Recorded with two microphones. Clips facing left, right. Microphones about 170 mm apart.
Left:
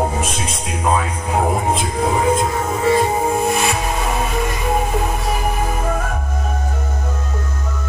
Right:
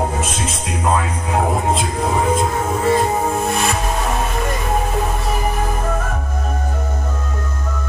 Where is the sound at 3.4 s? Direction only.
Centre (ahead or behind).